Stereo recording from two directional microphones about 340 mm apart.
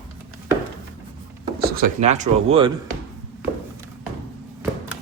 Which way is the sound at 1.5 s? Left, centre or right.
Right.